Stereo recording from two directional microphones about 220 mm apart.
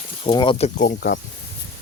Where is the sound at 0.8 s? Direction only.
40° left (ahead or behind).